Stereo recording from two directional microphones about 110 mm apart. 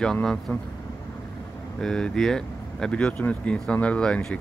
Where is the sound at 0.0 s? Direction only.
5° left (ahead or behind).